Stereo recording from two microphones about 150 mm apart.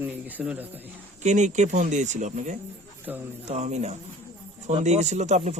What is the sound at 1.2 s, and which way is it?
A man's voice, 55° right (ahead or behind).